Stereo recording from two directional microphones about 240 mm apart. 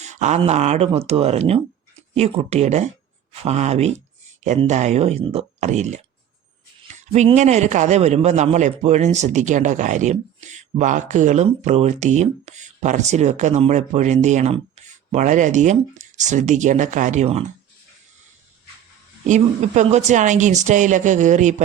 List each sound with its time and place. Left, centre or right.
0.0 s a man's voice: right
19.3 s speech: right